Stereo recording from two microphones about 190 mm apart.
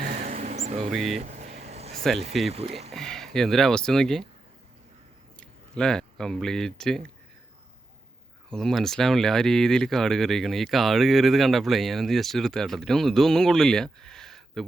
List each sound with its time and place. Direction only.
0.0 s a sound: 35° right (ahead or behind)
0.8 s speech: centre (ahead or behind)
1.1 s a sound: 35° right (ahead or behind)
2.5 s speech: 35° right (ahead or behind)
2.9 s speech: centre (ahead or behind)
5.4 s speech: 5° left (ahead or behind)
8.4 s speech: centre (ahead or behind)